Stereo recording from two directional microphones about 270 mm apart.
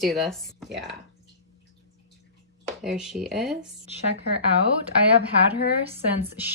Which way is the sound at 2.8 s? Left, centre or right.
Centre.